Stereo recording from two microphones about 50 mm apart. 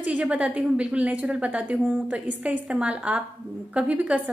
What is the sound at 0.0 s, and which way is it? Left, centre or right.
A woman's voice, right.